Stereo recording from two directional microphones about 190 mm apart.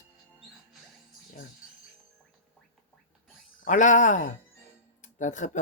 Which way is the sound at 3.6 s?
40° left (ahead or behind).